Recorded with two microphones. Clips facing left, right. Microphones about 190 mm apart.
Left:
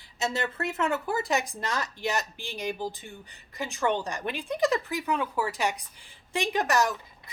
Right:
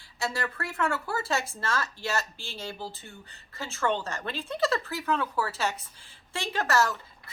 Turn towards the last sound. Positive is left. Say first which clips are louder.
# left 1 dB
turn(degrees=15)  # may be behind; listen again after turning